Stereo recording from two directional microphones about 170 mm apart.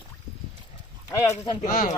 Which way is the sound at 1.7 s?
50° left (ahead or behind).